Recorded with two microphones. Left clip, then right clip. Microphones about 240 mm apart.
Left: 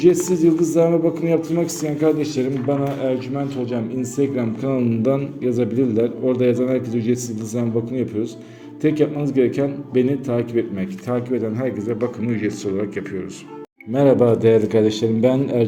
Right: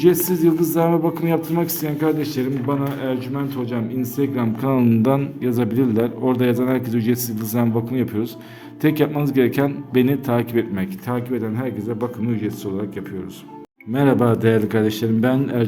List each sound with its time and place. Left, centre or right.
0.0 s a man's voice: centre
14.1 s speech: right
14.3 s a man's voice: centre